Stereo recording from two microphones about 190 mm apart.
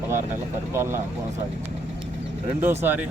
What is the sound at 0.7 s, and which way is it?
Speech, 15° right (ahead or behind).